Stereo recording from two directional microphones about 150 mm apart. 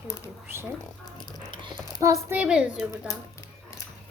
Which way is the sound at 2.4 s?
5° right (ahead or behind).